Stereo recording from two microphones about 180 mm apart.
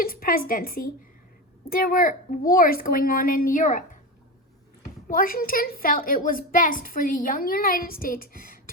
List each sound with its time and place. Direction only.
0.0 s a woman's voice: 55° left (ahead or behind)
5.0 s a woman's voice: 50° left (ahead or behind)